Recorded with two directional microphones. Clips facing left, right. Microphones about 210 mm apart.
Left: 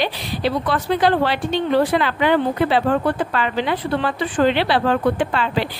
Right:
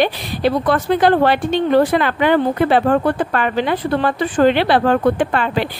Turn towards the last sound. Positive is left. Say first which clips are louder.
# right 3 dB
turn(degrees=-50)  # may be behind; listen again after turning